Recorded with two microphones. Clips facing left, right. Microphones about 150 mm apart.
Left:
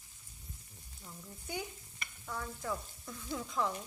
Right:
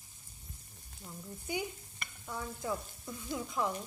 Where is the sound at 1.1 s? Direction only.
10° right (ahead or behind).